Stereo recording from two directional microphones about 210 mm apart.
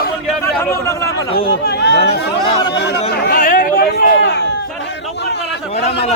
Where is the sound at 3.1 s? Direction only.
50° left (ahead or behind).